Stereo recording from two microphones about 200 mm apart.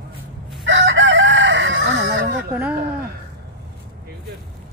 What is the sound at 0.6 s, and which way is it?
Chicken, 70° right (ahead or behind).